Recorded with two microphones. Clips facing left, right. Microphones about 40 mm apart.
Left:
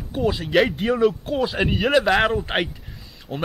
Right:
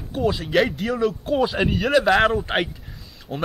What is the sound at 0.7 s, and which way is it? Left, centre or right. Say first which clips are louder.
Speech: left 3 dB; left.